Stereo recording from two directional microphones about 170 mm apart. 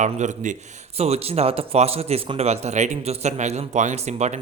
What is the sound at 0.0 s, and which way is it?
A man's voice, 45° right (ahead or behind).